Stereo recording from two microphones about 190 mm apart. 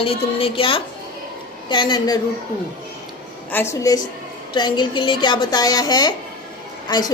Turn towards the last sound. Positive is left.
turn(degrees=20)  # may be behind; listen again after turning